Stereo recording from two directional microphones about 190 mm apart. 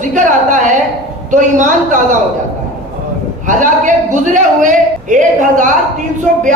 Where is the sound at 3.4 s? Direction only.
40° right (ahead or behind).